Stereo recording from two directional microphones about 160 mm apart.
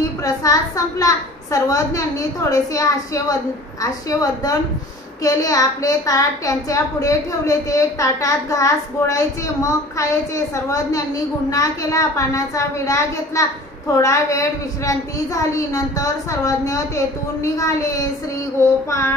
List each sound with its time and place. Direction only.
0.2 s a woman's voice: 20° left (ahead or behind)
18.9 s child singing: 15° left (ahead or behind)